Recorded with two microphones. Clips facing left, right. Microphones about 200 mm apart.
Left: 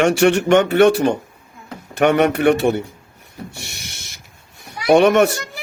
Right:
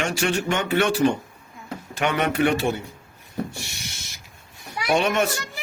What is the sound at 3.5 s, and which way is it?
Owl, 60° left (ahead or behind).